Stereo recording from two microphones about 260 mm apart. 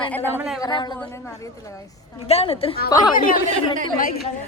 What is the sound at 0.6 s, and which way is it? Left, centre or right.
Speech, centre.